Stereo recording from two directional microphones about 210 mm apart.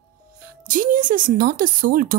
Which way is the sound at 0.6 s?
40° right (ahead or behind).